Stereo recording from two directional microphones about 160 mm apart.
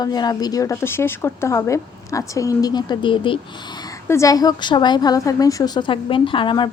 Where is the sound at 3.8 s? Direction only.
20° left (ahead or behind).